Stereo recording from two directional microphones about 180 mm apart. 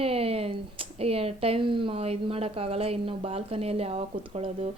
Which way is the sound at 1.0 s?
35° right (ahead or behind).